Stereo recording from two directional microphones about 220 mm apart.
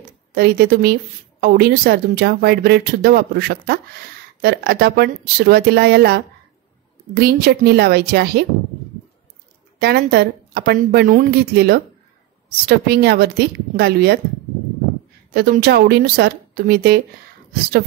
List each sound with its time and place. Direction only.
0.3 s speech: 45° right (ahead or behind)
9.8 s speech: 45° right (ahead or behind)
15.3 s speech: 45° right (ahead or behind)